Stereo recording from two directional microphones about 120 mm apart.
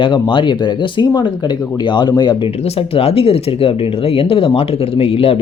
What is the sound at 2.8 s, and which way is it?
Speech, 55° left (ahead or behind).